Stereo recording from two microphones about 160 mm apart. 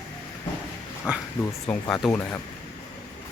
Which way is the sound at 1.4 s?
20° left (ahead or behind).